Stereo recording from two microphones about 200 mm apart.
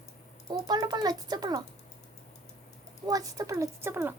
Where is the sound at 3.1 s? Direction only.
15° right (ahead or behind).